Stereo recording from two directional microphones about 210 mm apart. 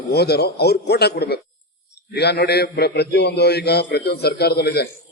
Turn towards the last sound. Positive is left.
turn(degrees=50)  # may be behind; listen again after turning